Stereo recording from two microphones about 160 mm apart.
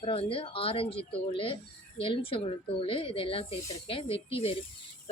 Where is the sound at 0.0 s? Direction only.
35° left (ahead or behind).